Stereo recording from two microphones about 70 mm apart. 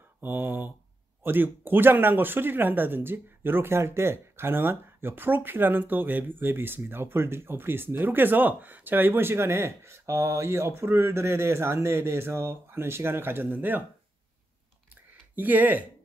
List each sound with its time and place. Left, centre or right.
0.2 s speech: right
15.3 s speech: right